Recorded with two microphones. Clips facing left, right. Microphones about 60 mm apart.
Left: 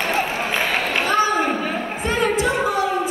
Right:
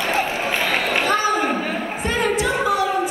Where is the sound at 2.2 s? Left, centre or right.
Left.